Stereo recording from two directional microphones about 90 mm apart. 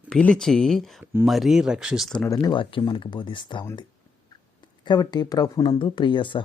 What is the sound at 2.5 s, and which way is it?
Speech, 65° left (ahead or behind).